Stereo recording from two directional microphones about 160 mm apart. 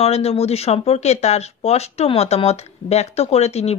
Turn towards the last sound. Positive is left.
turn(degrees=40)  # may be behind; listen again after turning